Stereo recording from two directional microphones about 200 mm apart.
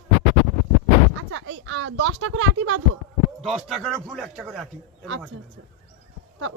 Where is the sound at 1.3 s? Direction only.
75° right (ahead or behind).